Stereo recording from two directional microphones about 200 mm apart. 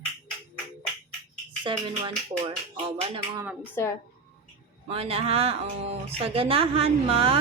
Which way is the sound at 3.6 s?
10° left (ahead or behind).